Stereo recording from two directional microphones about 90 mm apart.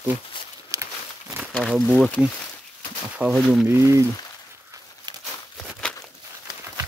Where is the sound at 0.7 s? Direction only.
35° right (ahead or behind).